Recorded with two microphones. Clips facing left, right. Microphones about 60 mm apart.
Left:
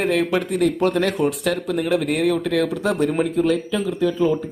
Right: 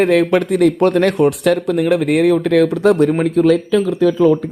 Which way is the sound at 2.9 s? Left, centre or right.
Centre.